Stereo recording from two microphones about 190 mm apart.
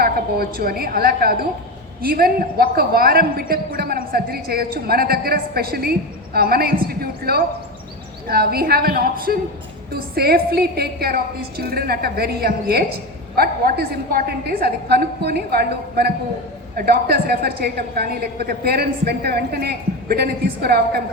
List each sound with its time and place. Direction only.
0.0 s a man's voice: 50° right (ahead or behind)